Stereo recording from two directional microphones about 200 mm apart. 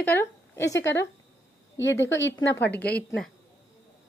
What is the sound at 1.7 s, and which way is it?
Speech, 65° left (ahead or behind).